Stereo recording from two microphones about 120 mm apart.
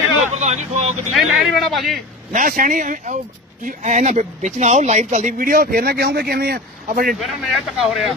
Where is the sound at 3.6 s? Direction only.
80° right.